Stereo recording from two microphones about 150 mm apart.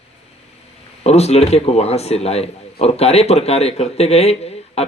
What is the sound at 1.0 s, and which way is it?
A man's voice, 45° left (ahead or behind).